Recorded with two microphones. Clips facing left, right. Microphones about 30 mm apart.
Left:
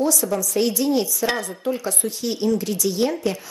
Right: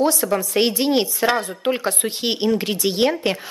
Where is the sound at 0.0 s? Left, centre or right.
Right.